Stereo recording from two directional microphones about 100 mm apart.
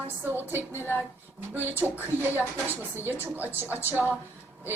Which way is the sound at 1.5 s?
20° right (ahead or behind).